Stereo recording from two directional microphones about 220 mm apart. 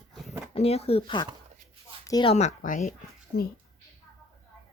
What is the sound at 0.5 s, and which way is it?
Speech, 30° left (ahead or behind).